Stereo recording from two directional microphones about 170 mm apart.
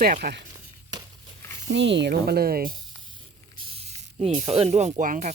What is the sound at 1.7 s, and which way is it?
Speech, 90° right.